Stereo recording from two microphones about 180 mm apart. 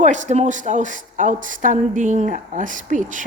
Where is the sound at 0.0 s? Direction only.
40° right (ahead or behind).